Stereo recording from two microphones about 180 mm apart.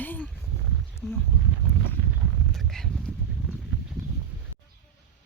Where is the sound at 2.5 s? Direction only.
Centre (ahead or behind).